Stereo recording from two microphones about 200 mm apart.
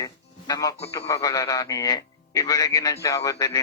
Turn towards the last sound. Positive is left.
turn(degrees=15)  # may be behind; listen again after turning